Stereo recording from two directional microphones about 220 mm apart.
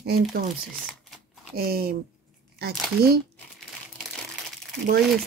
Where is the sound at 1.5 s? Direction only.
45° right (ahead or behind).